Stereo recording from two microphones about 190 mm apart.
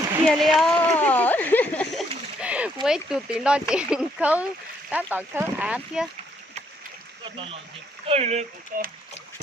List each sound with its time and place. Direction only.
0.3 s a sound: centre (ahead or behind)
2.8 s speech: 5° right (ahead or behind)
8.0 s speech: 35° right (ahead or behind)